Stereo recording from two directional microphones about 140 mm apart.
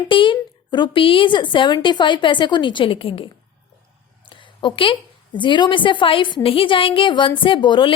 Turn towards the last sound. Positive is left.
turn(degrees=35)  # may be behind; listen again after turning